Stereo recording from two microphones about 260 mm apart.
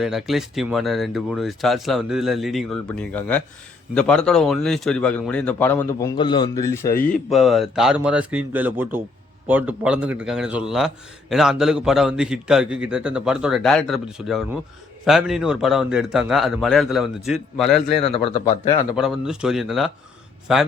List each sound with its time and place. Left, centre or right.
0.0 s a man's voice: centre
7.1 s a man's voice: centre
18.0 s speech: left
18.9 s a man's voice: centre